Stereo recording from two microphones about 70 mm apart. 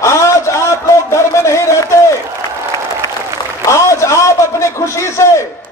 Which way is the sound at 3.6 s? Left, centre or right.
Left.